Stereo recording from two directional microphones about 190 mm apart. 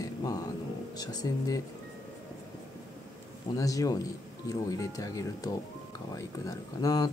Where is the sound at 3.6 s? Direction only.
20° left (ahead or behind).